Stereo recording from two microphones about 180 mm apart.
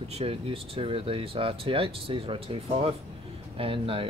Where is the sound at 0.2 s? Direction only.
30° right (ahead or behind).